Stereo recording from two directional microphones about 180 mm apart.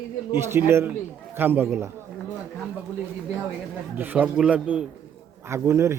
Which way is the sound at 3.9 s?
10° right (ahead or behind).